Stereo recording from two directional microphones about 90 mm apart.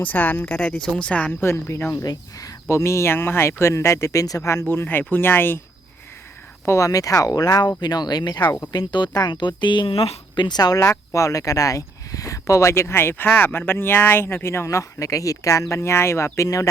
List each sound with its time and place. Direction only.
0.0 s speech: 20° left (ahead or behind); by 4.6 s 35° left (ahead or behind)
4.7 s speech: 25° left (ahead or behind)
6.7 s speech: 35° left (ahead or behind); by 10.4 s 90° left
10.4 s speech: 50° left (ahead or behind)
10.8 s speech: 35° left (ahead or behind)